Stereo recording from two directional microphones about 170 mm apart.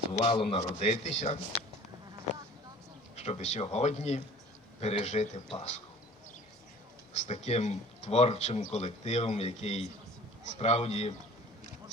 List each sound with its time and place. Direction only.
0.2 s speech: 30° left (ahead or behind)
3.2 s speech: 40° left (ahead or behind)
7.1 s speech: 45° left (ahead or behind)